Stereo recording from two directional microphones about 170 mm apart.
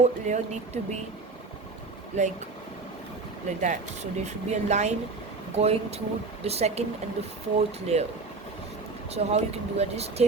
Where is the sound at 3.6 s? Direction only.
45° right (ahead or behind).